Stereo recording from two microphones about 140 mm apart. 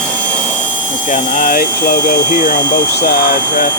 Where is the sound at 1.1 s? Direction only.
70° left (ahead or behind).